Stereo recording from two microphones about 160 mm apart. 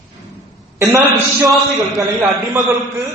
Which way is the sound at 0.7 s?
15° right (ahead or behind).